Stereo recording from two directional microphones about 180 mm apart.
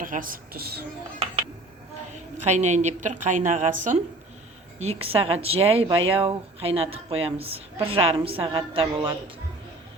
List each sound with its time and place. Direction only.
0.0 s a woman's voice: 50° right (ahead or behind)
2.4 s a woman's voice: 40° right (ahead or behind)